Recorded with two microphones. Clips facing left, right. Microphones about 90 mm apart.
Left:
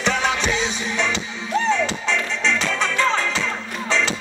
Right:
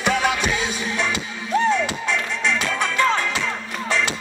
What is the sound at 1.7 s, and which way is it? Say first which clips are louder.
Music: left 1 dB; 10° right (ahead or behind).